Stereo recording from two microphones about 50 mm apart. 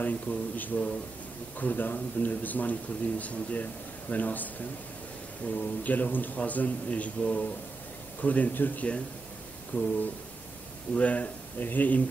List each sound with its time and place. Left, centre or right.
0.0 s speech: left
11.0 s speech: left